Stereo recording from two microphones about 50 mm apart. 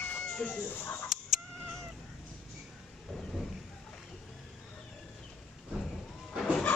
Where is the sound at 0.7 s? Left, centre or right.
Left.